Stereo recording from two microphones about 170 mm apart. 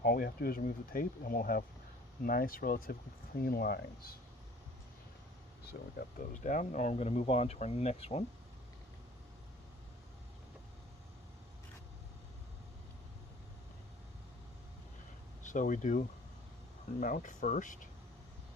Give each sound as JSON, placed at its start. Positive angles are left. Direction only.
{"t": 0.0, "sound": "speech", "side_deg": 60}
{"t": 5.6, "sound": "speech", "side_deg": 70}
{"t": 6.3, "sound": "speech", "side_deg": 45}
{"t": 15.4, "sound": "speech", "side_deg": 50}